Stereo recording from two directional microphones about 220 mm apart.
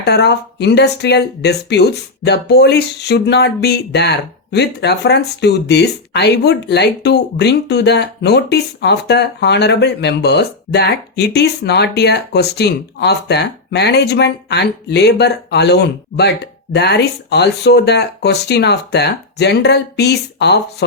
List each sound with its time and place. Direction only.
0.0 s speech: 50° left (ahead or behind)